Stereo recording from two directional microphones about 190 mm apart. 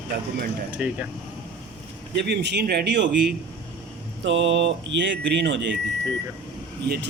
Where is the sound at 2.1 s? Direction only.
60° right (ahead or behind).